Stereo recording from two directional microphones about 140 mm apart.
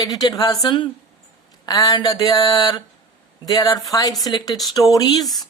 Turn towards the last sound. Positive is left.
turn(degrees=30)  # may be behind; listen again after turning